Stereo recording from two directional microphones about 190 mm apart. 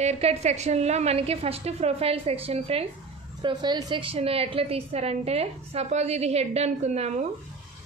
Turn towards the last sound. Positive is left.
turn(degrees=-35)  # may be behind; listen again after turning